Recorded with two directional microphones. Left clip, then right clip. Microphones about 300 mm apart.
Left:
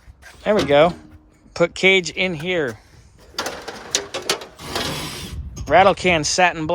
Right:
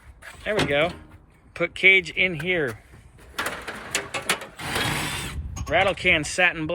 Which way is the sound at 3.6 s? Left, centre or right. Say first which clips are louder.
Left 4 dB; left.